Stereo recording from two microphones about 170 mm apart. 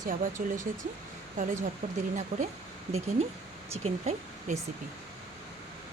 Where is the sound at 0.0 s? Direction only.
55° right (ahead or behind).